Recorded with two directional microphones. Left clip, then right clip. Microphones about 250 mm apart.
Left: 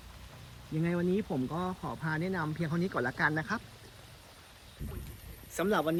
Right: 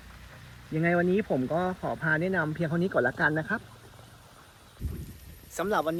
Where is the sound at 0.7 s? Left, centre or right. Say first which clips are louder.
Right 7 dB; centre.